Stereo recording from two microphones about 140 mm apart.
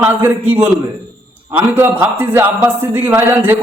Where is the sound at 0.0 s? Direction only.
15° right (ahead or behind).